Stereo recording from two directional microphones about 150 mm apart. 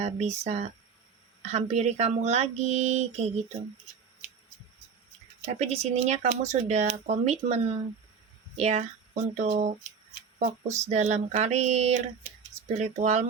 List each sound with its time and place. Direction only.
0.0 s speech: 45° right (ahead or behind)
5.5 s speech: 45° right (ahead or behind)
10.8 s speech: 45° right (ahead or behind)